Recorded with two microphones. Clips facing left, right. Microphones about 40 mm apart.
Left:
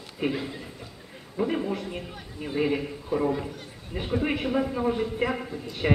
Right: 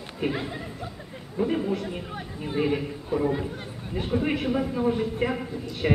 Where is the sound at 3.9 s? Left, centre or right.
Centre.